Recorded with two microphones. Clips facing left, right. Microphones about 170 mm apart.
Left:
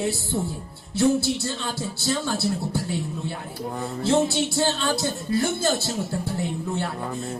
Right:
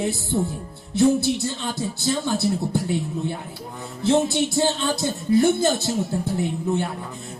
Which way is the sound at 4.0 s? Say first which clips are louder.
Right 2 dB; 20° right (ahead or behind).